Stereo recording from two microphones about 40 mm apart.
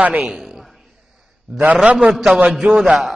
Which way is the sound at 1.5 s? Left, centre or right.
Right.